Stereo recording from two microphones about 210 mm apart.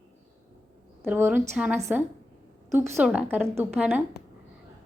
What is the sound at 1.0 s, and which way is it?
A woman's voice, 10° right (ahead or behind).